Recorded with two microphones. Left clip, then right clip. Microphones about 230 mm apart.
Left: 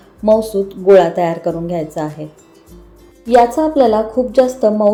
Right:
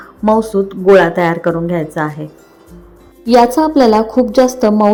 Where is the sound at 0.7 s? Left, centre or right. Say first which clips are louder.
Right 1 dB; centre.